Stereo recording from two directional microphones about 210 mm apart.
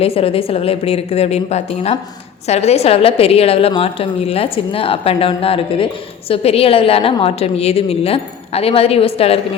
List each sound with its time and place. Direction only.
0.0 s a woman's voice: 30° left (ahead or behind)